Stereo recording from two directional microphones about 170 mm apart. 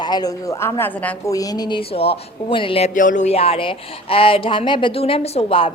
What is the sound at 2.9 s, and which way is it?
A woman's voice, 50° left (ahead or behind).